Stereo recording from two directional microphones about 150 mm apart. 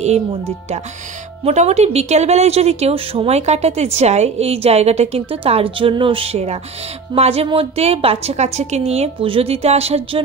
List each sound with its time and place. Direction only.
1.4 s speech: 45° right (ahead or behind)